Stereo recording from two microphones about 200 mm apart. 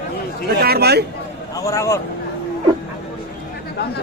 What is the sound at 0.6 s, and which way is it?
Speech, 50° right (ahead or behind).